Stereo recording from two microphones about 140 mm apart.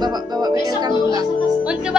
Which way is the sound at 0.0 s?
30° right (ahead or behind).